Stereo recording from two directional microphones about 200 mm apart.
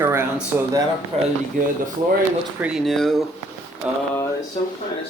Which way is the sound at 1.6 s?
40° right (ahead or behind).